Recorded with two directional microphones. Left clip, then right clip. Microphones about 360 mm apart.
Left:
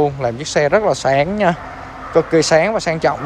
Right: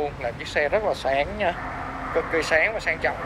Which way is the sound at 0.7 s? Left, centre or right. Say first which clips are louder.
Left 9 dB; left.